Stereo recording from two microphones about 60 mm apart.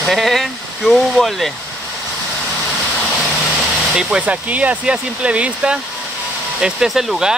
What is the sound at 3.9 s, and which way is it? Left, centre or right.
Speech, centre.